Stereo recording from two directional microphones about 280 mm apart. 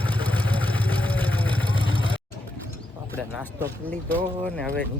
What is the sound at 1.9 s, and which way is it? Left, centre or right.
Vehicle, left.